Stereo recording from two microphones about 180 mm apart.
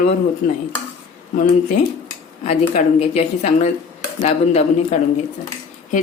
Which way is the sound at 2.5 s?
35° left (ahead or behind).